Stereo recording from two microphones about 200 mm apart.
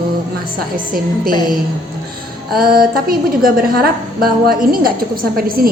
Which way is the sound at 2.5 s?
50° right (ahead or behind).